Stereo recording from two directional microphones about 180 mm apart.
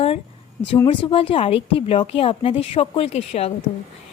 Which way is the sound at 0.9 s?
30° left (ahead or behind).